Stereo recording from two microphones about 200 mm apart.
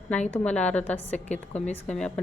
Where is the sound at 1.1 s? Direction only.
35° left (ahead or behind).